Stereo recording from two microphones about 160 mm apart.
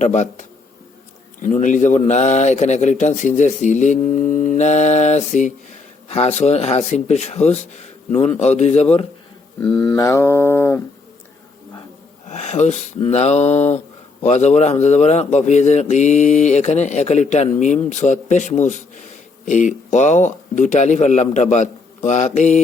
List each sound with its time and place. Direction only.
0.0 s a man's voice: 45° left (ahead or behind)
9.6 s speech: 5° left (ahead or behind)
9.9 s plucked string instrument: 20° left (ahead or behind)
12.3 s a man's voice: 45° left (ahead or behind)